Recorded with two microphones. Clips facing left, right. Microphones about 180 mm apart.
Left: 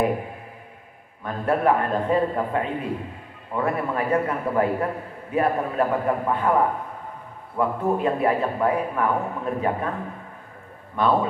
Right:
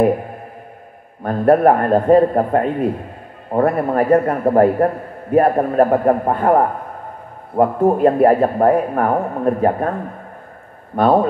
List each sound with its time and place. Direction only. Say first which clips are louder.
1.2 s a man's voice: right 9 dB; 50° right (ahead or behind)